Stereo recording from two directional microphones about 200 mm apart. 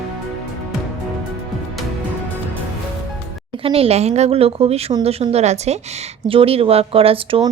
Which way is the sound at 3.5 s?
30° right (ahead or behind).